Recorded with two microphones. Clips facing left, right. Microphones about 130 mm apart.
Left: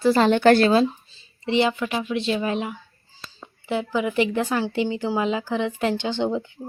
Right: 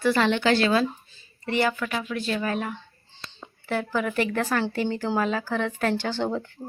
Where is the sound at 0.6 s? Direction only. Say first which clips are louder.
Left 4 dB; 30° left (ahead or behind).